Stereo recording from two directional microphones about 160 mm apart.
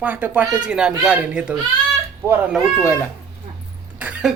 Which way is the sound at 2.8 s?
15° left (ahead or behind).